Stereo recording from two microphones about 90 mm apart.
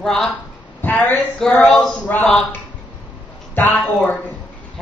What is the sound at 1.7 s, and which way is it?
Speech, 5° left (ahead or behind).